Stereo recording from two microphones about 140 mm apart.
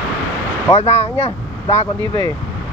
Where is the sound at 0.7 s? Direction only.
45° left (ahead or behind).